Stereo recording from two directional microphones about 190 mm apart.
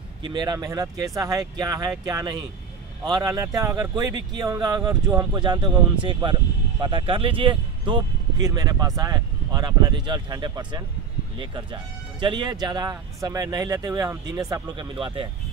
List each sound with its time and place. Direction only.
0.2 s speech: 25° right (ahead or behind)